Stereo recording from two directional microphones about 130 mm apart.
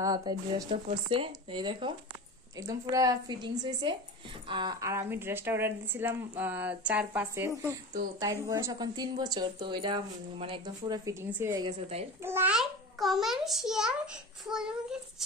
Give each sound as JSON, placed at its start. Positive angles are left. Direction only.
{"t": 0.0, "sound": "a woman's voice", "side_deg": -30}
{"t": 2.5, "sound": "a woman's voice", "side_deg": -25}
{"t": 10.8, "sound": "a woman's voice", "side_deg": -25}
{"t": 11.2, "sound": "speech", "side_deg": -15}
{"t": 12.5, "sound": "a child's voice", "side_deg": 0}